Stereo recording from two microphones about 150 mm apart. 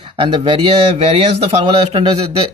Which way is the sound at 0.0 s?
35° right (ahead or behind).